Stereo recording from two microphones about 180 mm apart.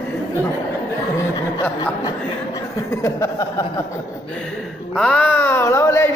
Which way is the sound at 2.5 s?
20° left (ahead or behind).